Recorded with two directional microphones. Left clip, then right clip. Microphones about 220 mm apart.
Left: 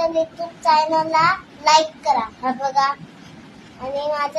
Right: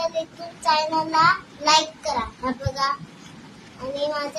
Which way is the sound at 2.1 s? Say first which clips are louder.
Left 5 dB; 20° right (ahead or behind).